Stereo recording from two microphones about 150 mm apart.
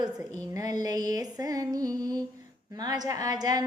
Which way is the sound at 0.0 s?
25° right (ahead or behind).